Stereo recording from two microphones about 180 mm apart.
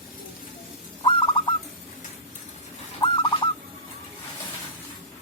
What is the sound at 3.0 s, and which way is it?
Bird, 25° left (ahead or behind).